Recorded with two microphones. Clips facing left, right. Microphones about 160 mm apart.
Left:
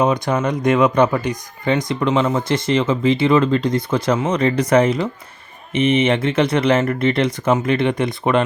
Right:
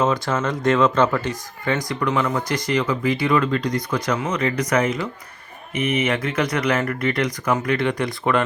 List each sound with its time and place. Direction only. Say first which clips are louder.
0.0 s speech: left 3 dB; 15° left (ahead or behind)